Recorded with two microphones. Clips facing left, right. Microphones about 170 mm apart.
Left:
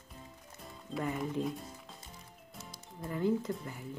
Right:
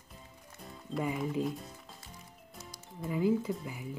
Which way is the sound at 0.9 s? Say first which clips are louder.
Right 2 dB; centre (ahead or behind).